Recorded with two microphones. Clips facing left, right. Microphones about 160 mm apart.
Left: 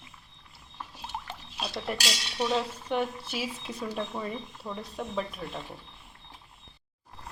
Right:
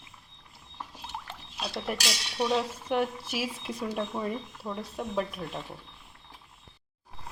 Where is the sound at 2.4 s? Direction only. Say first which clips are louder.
Right 1 dB; 10° right (ahead or behind).